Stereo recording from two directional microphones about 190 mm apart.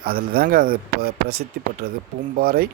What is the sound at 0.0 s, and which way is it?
Speech, 50° right (ahead or behind).